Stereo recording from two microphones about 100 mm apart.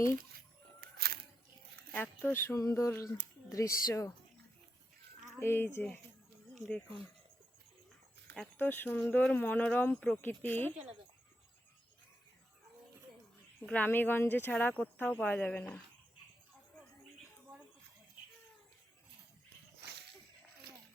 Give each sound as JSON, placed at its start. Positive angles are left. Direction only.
{"t": 1.9, "sound": "speech", "side_deg": 15}
{"t": 5.4, "sound": "speech", "side_deg": 25}
{"t": 8.5, "sound": "speech", "side_deg": 20}
{"t": 13.7, "sound": "speech", "side_deg": 20}